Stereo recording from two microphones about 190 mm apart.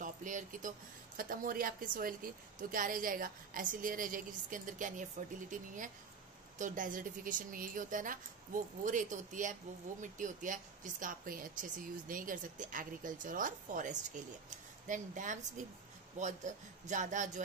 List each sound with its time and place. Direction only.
0.0 s speech: 40° right (ahead or behind)
6.6 s a man's voice: 45° right (ahead or behind)